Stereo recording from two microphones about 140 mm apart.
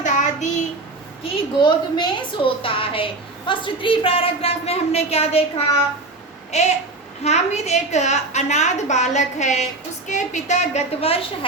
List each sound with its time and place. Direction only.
0.0 s child singing: 60° left (ahead or behind)
1.2 s a woman's voice: 35° left (ahead or behind)
6.5 s a sound: 55° left (ahead or behind)
7.3 s a woman's voice: 50° left (ahead or behind)